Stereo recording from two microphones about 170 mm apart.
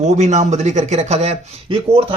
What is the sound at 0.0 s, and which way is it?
Speech, 45° right (ahead or behind).